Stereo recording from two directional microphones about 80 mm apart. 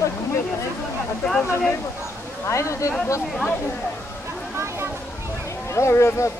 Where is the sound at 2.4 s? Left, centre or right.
Left.